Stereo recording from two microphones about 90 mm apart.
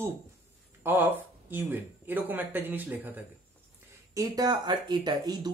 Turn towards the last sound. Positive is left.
turn(degrees=-50)  # may be behind; listen again after turning